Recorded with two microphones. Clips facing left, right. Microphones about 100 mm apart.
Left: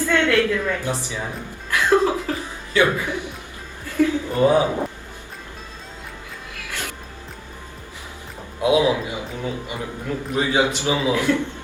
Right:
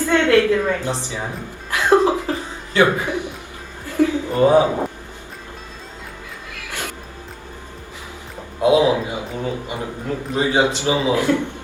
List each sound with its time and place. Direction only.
0.0 s a sound: 20° right (ahead or behind)
0.8 s a man's voice: 25° right (ahead or behind)
1.7 s laughter: 20° right (ahead or behind)
2.7 s a man's voice: 25° right (ahead or behind)
6.7 s music: 20° right (ahead or behind)
8.6 s a man's voice: 30° right (ahead or behind)